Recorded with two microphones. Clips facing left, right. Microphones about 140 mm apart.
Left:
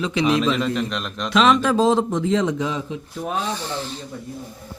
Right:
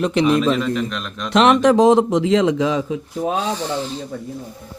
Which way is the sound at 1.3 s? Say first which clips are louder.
Right 4 dB; 65° right (ahead or behind).